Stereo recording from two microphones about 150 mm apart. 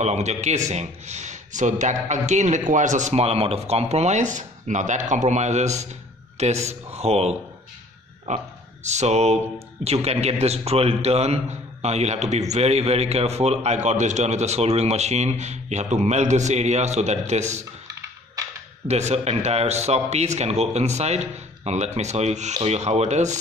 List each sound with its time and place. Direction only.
0.0 s a man's voice: 50° right (ahead or behind)
18.9 s a man's voice: 45° right (ahead or behind)